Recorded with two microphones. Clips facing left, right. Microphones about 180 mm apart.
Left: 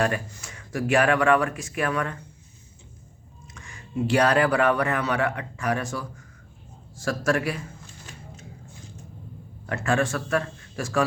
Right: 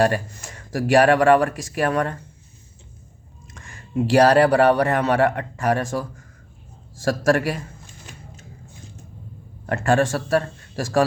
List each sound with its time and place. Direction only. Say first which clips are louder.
0.6 s speech: right 5 dB; 40° right (ahead or behind)
4.1 s a man's voice: right 6 dB; 40° right (ahead or behind)
9.6 s a man's voice: right 5 dB; 45° right (ahead or behind)